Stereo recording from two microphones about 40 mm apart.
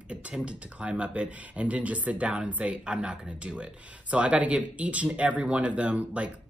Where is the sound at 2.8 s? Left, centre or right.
Right.